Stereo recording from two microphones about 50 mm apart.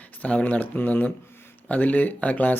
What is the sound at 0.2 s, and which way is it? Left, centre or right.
Speech, left.